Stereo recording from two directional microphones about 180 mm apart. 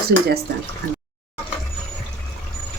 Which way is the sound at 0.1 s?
70° right (ahead or behind).